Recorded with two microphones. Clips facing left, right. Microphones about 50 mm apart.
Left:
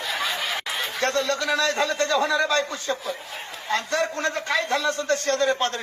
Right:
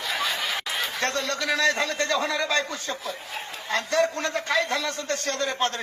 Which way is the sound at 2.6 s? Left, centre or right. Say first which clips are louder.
Left 4 dB; left.